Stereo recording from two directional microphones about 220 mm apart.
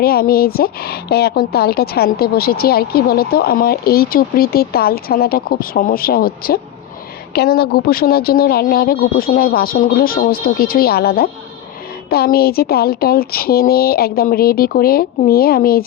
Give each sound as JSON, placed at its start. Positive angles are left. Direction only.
{"t": 0.0, "sound": "speech", "side_deg": 45}